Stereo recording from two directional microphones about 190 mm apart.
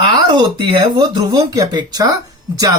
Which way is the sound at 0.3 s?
25° right (ahead or behind).